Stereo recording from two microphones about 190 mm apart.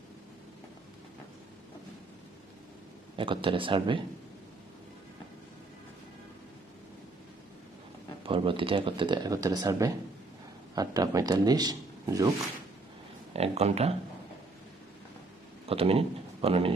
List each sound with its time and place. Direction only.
3.2 s speech: 25° right (ahead or behind)
8.2 s speech: 25° right (ahead or behind)
13.3 s speech: 35° right (ahead or behind)
15.6 s speech: 30° right (ahead or behind)